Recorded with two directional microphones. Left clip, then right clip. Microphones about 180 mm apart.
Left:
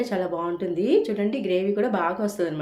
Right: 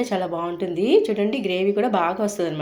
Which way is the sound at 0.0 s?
15° right (ahead or behind).